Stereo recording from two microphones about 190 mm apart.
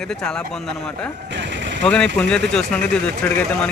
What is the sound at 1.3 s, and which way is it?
Vehicle, 70° right (ahead or behind).